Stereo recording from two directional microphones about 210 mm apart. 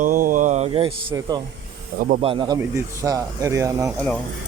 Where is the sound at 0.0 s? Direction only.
40° right (ahead or behind); by 1.4 s 25° right (ahead or behind).